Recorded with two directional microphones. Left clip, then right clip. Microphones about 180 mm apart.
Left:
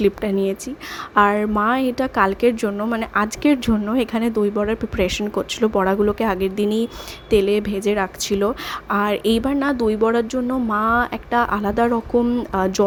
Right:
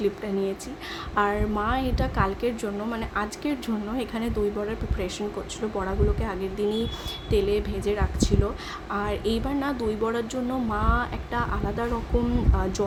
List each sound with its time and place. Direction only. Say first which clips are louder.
0.0 s a woman's voice: left 7 dB; 45° left (ahead or behind)